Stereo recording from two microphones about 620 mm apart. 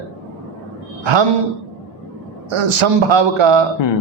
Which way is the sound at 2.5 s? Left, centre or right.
Right.